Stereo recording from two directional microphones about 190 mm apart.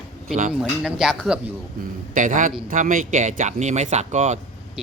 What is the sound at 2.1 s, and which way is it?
A man's voice, 45° right (ahead or behind).